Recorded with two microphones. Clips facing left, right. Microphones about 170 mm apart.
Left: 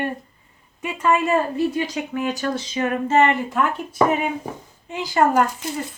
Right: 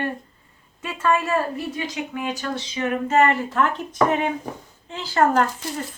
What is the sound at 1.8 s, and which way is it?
Speech, 45° left (ahead or behind).